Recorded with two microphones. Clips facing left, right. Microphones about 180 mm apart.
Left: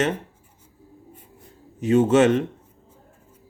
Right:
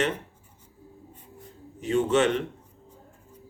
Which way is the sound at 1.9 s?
45° left (ahead or behind).